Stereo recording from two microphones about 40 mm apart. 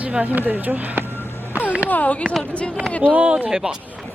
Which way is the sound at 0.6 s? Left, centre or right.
Right.